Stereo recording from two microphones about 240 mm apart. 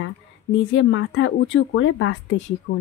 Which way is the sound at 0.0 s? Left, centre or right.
Left.